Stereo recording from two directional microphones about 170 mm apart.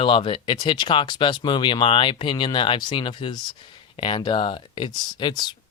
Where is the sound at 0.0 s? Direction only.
30° left (ahead or behind).